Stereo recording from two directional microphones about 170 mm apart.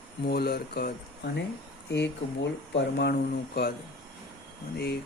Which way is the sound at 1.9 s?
90° left.